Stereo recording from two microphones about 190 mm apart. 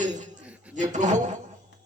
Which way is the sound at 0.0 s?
40° right (ahead or behind).